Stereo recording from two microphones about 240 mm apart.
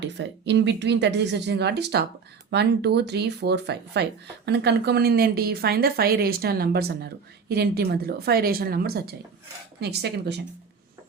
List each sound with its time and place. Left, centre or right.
0.0 s speech: right